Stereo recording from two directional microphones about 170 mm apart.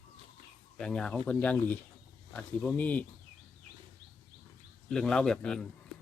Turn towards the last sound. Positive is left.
turn(degrees=5)  # may be behind; listen again after turning